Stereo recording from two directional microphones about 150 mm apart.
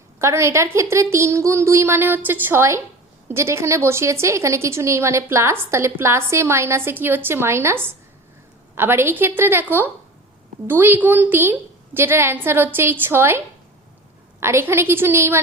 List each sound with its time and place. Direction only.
0.2 s a woman's voice: 20° right (ahead or behind)
14.4 s a woman's voice: 15° right (ahead or behind)